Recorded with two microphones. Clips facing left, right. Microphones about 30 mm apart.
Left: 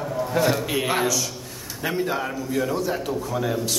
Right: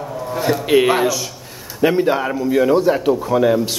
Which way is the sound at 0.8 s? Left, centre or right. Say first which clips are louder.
Right 7 dB; centre.